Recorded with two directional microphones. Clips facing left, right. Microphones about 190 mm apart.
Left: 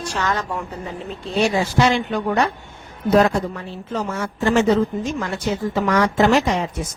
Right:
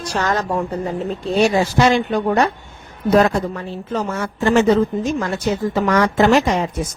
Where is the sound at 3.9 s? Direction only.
55° right (ahead or behind).